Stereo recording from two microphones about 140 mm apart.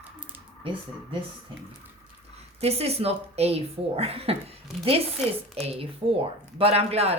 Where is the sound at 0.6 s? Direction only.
40° right (ahead or behind).